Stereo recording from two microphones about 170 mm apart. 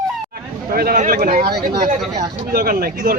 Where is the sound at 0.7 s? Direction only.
60° right (ahead or behind).